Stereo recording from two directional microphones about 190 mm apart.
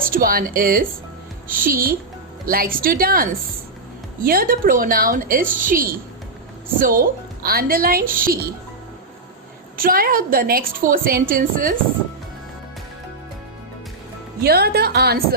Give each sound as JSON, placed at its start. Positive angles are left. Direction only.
{"t": 0.0, "sound": "a woman's voice", "side_deg": -50}
{"t": 9.7, "sound": "a woman's voice", "side_deg": -50}
{"t": 14.4, "sound": "a woman's voice", "side_deg": -55}